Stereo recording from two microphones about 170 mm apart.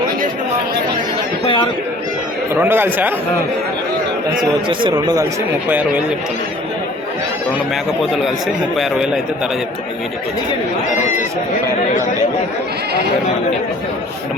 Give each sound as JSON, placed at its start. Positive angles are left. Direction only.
{"t": 2.6, "sound": "a man's voice", "side_deg": -15}
{"t": 4.8, "sound": "speech", "side_deg": -25}
{"t": 5.6, "sound": "a man's voice", "side_deg": -10}
{"t": 8.7, "sound": "a man's voice", "side_deg": 0}
{"t": 10.9, "sound": "speech", "side_deg": 45}